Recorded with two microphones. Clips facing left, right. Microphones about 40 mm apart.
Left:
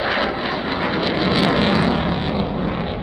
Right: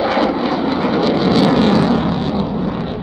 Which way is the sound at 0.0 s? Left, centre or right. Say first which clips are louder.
Right 5 dB; centre.